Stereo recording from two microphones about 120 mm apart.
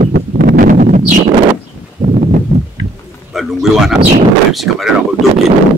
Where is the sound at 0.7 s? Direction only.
90° right.